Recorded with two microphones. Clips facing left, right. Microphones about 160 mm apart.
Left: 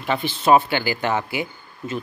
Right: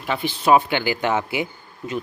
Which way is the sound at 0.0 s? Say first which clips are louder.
Left 1 dB; 10° right (ahead or behind).